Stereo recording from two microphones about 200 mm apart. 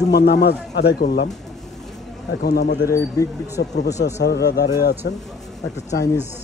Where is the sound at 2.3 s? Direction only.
55° left (ahead or behind).